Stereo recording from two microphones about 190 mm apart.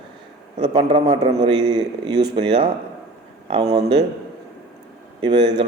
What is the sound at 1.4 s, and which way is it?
A man's voice, 20° right (ahead or behind).